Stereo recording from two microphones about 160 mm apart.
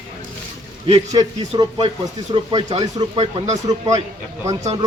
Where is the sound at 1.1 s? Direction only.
30° right (ahead or behind).